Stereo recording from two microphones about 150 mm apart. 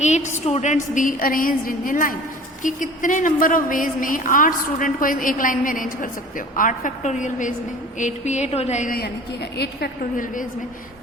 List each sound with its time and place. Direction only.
0.0 s a woman's voice: 50° left (ahead or behind)
7.9 s a sound: 55° left (ahead or behind)
9.6 s a woman's voice: 75° left (ahead or behind)